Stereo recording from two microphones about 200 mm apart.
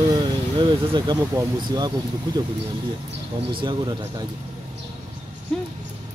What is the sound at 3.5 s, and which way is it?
Speech, 25° right (ahead or behind).